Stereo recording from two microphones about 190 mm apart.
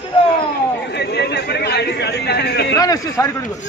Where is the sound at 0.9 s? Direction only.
60° left (ahead or behind).